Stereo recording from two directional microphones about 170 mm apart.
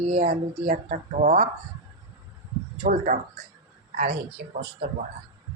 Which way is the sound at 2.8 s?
50° right (ahead or behind).